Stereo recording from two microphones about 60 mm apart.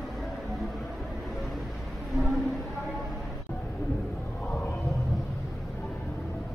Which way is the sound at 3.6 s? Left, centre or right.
Left.